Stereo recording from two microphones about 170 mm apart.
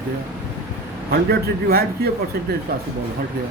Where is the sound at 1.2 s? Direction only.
65° right (ahead or behind).